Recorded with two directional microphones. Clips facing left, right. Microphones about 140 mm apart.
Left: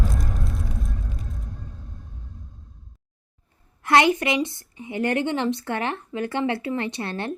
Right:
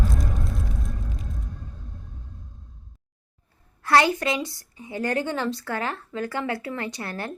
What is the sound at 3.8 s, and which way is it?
Speech, 20° left (ahead or behind).